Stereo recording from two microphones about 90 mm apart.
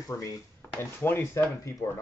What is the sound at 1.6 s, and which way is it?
Speech, 35° left (ahead or behind).